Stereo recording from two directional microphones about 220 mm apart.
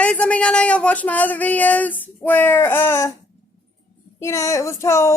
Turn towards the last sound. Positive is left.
turn(degrees=10)  # may be behind; listen again after turning